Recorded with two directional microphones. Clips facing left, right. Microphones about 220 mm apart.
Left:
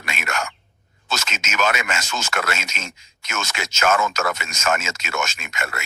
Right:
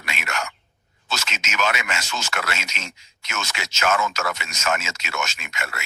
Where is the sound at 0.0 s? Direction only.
45° left (ahead or behind).